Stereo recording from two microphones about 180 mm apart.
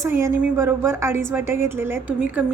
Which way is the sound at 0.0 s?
15° right (ahead or behind).